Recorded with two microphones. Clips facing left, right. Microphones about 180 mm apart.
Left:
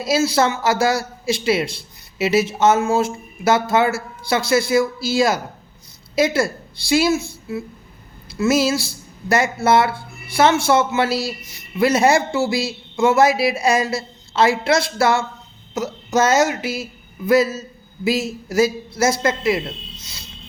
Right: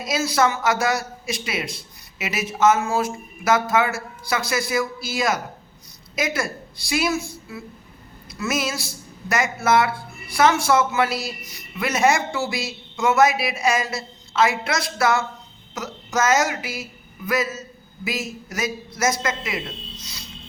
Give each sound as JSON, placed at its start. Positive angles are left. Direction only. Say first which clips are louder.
{"t": 0.0, "sound": "a woman's voice", "louder": "left 4 dB", "side_deg": 30}